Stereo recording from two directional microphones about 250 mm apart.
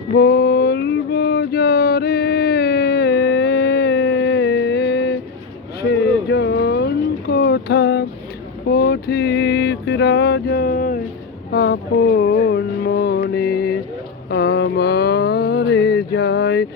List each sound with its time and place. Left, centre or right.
0.1 s a sound: left
11.5 s music: left
14.3 s mantra: left